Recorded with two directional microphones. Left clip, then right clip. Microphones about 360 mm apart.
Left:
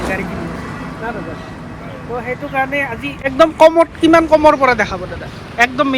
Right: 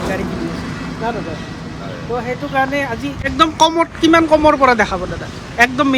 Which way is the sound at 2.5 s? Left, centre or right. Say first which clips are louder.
Right 1 dB; centre.